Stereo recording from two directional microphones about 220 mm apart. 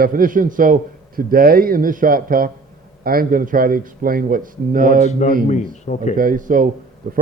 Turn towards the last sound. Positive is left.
turn(degrees=-40)  # may be behind; listen again after turning